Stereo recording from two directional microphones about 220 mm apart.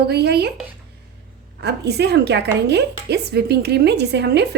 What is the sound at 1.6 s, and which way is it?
A woman's voice, 50° right (ahead or behind).